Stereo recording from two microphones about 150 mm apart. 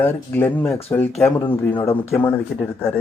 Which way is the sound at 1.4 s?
30° left (ahead or behind).